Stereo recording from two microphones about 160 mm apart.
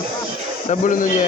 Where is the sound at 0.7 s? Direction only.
55° left (ahead or behind).